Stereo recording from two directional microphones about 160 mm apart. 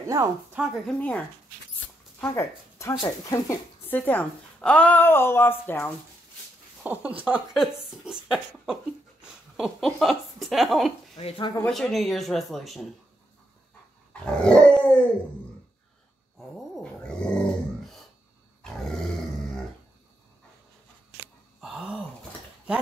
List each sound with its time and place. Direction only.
0.6 s speech: 5° right (ahead or behind); by 3.5 s 25° left (ahead or behind)
3.8 s a woman's voice: 10° left (ahead or behind)
6.8 s a woman's voice: 10° right (ahead or behind)
11.1 s speech: 35° left (ahead or behind)
11.6 s speech: 5° left (ahead or behind)
14.2 s dog: 5° left (ahead or behind)
16.3 s dog: 5° left (ahead or behind)
18.6 s grunt: 5° left (ahead or behind)
21.5 s gasp: 5° right (ahead or behind)